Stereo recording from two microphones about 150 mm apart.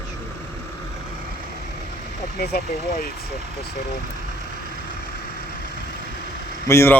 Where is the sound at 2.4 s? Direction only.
90° left.